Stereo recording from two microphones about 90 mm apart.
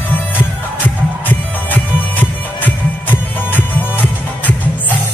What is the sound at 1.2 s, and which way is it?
Music, 20° left (ahead or behind).